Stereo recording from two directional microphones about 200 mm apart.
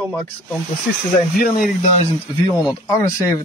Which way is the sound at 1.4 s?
40° left (ahead or behind).